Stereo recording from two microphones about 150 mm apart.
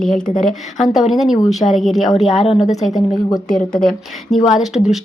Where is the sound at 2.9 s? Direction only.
25° left (ahead or behind).